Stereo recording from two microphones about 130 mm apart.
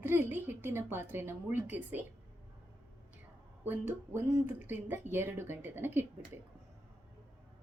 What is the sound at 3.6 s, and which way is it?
Speech, 15° right (ahead or behind).